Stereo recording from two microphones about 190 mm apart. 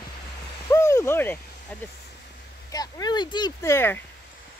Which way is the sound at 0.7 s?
15° left (ahead or behind).